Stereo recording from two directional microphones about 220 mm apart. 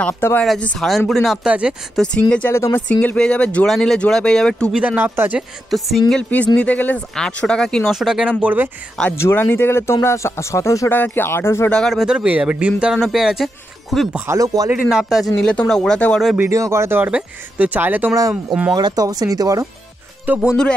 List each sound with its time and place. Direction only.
0.0 s speech: 10° left (ahead or behind)
4.8 s speech: 10° right (ahead or behind)
9.0 s speech: 10° left (ahead or behind)
14.2 s speech: 15° right (ahead or behind)
16.4 s speech: 15° right (ahead or behind)
18.8 s speech: 20° right (ahead or behind)
20.2 s speech: 5° right (ahead or behind)